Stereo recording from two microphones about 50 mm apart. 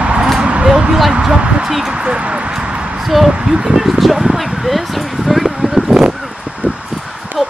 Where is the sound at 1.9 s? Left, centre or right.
Centre.